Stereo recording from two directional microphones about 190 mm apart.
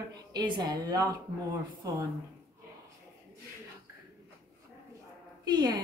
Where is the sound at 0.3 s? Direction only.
25° right (ahead or behind).